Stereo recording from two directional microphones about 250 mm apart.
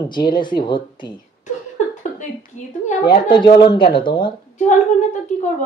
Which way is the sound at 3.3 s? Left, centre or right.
Centre.